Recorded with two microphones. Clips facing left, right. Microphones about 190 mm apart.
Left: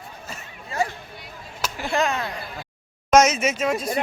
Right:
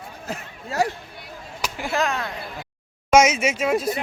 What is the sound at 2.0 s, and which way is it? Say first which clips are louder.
Speech: left 1 dB; centre (ahead or behind).